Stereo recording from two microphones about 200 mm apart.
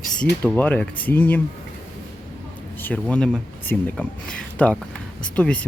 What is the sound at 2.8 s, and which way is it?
Speech, 10° left (ahead or behind).